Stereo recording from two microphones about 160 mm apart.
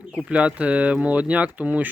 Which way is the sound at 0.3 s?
10° right (ahead or behind).